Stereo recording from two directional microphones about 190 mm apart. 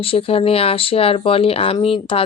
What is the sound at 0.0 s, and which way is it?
Speech, 30° left (ahead or behind).